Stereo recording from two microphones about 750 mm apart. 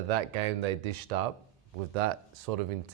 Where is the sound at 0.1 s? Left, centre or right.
Right.